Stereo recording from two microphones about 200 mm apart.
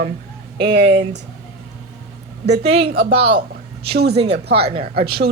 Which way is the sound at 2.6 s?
30° right (ahead or behind).